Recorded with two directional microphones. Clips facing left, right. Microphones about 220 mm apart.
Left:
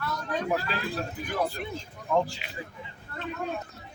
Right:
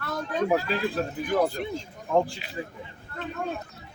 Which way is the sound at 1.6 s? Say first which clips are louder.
Right 4 dB; 35° right (ahead or behind).